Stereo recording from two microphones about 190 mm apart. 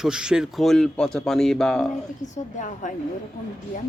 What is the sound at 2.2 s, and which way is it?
Speech, 40° left (ahead or behind).